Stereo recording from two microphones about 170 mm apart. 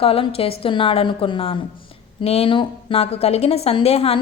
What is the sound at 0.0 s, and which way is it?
A woman's voice, 35° left (ahead or behind).